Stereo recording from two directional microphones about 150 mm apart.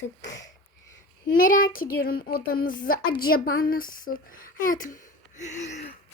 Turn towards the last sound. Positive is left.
turn(degrees=50)  # may be behind; listen again after turning